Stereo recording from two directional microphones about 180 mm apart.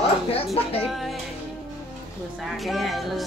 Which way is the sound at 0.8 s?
Centre (ahead or behind).